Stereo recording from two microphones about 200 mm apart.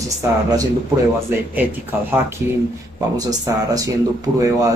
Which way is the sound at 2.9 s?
20° right (ahead or behind).